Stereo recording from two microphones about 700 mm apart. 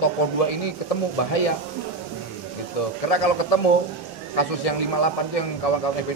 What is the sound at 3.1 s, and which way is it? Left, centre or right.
A man's voice, left.